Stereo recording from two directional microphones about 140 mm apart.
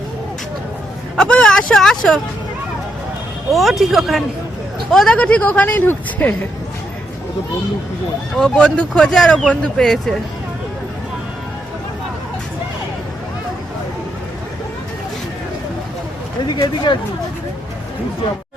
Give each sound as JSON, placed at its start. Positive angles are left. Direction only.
{"t": 1.1, "sound": "speech", "side_deg": 5}
{"t": 3.5, "sound": "speech", "side_deg": 0}
{"t": 8.4, "sound": "speech", "side_deg": 5}
{"t": 16.4, "sound": "speech", "side_deg": 30}